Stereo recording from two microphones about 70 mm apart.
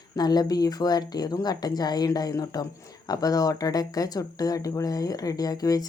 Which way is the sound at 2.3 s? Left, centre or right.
Left.